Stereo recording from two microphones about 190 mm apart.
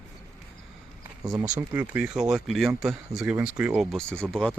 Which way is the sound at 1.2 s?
20° right (ahead or behind).